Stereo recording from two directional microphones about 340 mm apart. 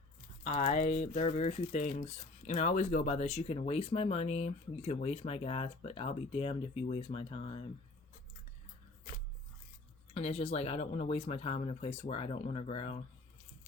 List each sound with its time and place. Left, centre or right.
0.4 s speech: left
10.2 s speech: centre